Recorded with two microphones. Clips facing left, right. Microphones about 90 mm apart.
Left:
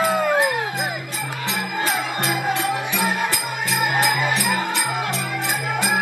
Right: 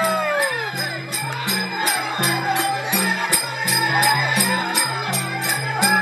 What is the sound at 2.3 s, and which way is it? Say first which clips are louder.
Music: right 1 dB; 20° right (ahead or behind).